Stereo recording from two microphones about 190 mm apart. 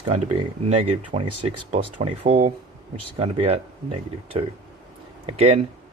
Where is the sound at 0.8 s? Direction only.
30° right (ahead or behind).